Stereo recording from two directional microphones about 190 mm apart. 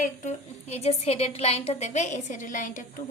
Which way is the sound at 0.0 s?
40° left (ahead or behind).